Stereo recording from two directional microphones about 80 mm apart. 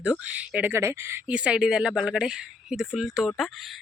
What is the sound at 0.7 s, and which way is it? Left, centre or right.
Speech, right.